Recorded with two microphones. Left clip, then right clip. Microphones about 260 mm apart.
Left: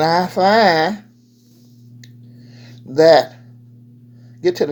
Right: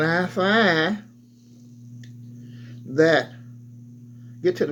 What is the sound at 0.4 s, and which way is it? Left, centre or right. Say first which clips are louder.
Speech: left 9 dB; left.